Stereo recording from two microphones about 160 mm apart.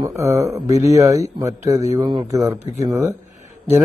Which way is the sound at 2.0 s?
30° right (ahead or behind).